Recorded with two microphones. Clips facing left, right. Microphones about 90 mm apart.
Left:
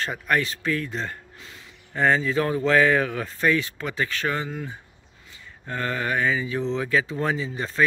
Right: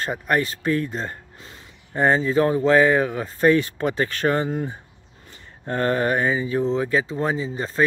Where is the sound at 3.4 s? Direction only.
40° right (ahead or behind).